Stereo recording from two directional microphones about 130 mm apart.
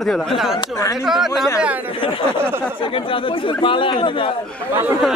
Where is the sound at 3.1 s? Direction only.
40° left (ahead or behind).